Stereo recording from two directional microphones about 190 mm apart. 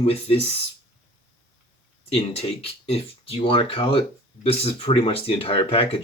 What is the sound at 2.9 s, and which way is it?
Speech, 30° left (ahead or behind).